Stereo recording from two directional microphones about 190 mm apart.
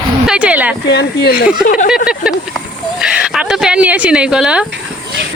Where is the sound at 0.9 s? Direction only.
60° left (ahead or behind).